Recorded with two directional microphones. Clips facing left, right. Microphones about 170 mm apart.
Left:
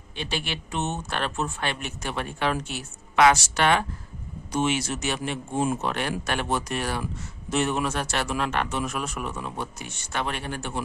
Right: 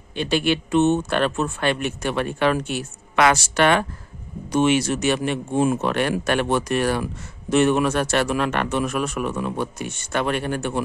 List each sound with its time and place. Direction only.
0.2 s speech: 55° right (ahead or behind)